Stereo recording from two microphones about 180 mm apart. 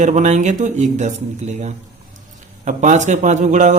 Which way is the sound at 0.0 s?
40° right (ahead or behind).